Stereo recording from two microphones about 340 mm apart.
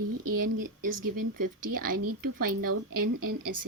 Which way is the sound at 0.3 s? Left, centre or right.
Right.